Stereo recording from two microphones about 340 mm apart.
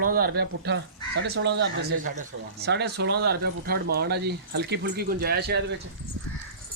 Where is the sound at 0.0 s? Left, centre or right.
Right.